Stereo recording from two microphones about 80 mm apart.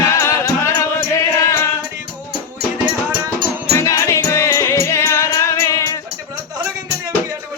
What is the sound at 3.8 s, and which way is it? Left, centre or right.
Music, left.